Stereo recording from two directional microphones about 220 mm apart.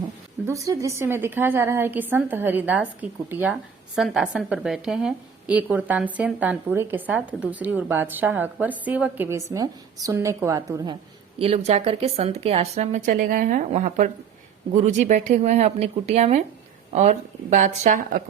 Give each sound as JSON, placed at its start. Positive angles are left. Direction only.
{"t": 0.4, "sound": "a woman's voice", "side_deg": -15}
{"t": 11.3, "sound": "speech", "side_deg": -30}